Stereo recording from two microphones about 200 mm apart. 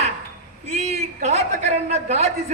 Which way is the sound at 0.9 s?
35° right (ahead or behind).